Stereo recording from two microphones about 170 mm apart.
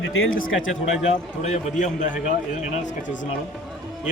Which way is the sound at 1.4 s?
40° left (ahead or behind).